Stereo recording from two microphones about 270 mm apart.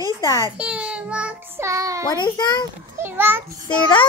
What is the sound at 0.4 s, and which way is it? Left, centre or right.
A child's voice, centre.